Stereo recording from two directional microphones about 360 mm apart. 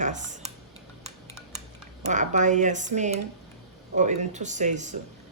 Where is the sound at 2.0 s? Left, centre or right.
Centre.